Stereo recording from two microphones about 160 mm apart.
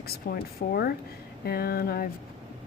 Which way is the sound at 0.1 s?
75° left (ahead or behind).